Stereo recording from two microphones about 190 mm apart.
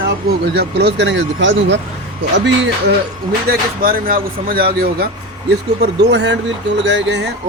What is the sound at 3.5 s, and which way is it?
Speech, 50° right (ahead or behind).